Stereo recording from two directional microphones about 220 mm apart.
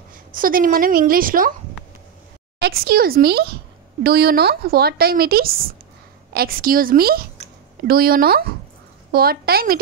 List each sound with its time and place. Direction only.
0.3 s a woman's voice: 40° right (ahead or behind)
2.6 s a woman's voice: 45° right (ahead or behind)